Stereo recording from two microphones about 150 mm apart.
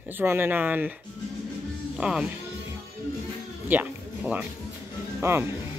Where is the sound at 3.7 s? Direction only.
10° right (ahead or behind).